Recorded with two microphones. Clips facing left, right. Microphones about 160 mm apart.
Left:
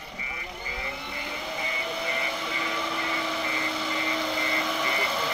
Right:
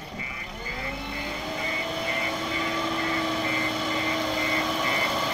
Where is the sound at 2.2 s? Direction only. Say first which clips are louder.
Right 3 dB; 40° right (ahead or behind).